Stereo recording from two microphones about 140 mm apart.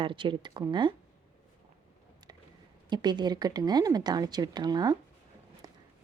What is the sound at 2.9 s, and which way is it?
A woman's voice, 30° right (ahead or behind).